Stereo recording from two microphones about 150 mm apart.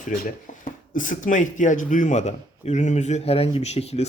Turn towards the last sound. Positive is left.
turn(degrees=45)  # may be behind; listen again after turning